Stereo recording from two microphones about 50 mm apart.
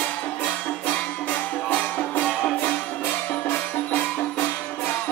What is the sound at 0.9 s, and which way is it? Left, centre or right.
Music, left.